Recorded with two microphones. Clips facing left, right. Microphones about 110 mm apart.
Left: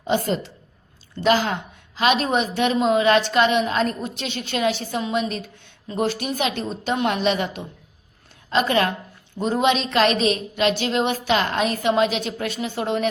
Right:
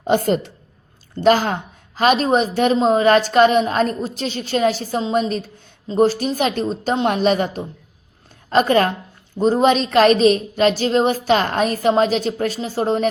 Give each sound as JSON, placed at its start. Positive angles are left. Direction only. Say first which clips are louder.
{"t": 0.1, "sound": "a woman's voice", "louder": "right 5 dB", "side_deg": -55}